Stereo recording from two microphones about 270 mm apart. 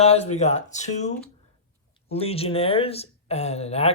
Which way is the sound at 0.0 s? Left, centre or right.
Left.